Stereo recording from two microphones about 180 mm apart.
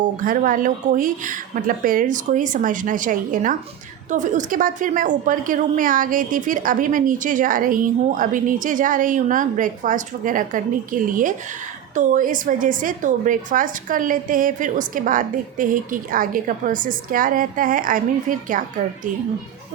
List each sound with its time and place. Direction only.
0.3 s a woman's voice: 50° right (ahead or behind)